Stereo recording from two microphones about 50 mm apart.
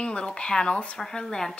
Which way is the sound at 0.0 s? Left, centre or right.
Centre.